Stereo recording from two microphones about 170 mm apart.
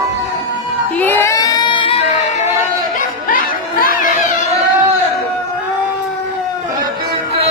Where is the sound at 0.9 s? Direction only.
10° left (ahead or behind); by 2.0 s 30° left (ahead or behind).